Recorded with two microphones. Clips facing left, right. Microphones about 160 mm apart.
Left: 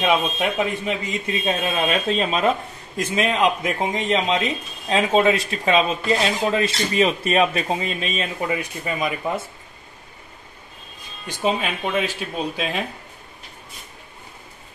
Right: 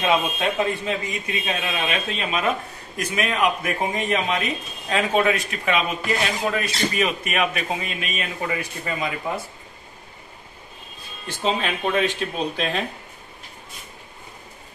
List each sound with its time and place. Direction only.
0.0 s speech: 15° left (ahead or behind)
1.4 s speech: 35° left (ahead or behind)
8.5 s speech: 20° left (ahead or behind)
11.2 s speech: 10° left (ahead or behind)